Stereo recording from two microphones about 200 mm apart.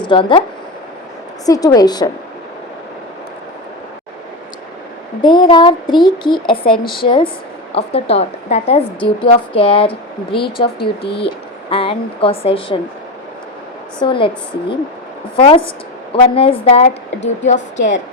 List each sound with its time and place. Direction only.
0.0 s speech: 25° left (ahead or behind)
1.5 s a woman's voice: 20° left (ahead or behind)
5.2 s a woman's voice: 25° left (ahead or behind)
10.8 s speech: 55° left (ahead or behind)
11.7 s a woman's voice: 25° left (ahead or behind)
14.0 s a woman's voice: 25° left (ahead or behind)
17.7 s a woman's voice: 65° left (ahead or behind)